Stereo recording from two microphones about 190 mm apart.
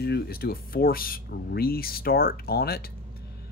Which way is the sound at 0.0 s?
55° left (ahead or behind).